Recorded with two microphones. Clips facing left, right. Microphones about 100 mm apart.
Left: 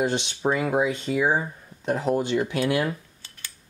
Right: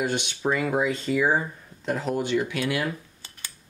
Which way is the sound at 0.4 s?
20° left (ahead or behind).